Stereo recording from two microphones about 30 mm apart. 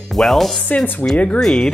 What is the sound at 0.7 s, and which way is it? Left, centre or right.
Speech, left.